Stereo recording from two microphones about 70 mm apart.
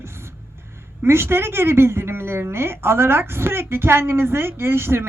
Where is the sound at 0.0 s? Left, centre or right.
Right.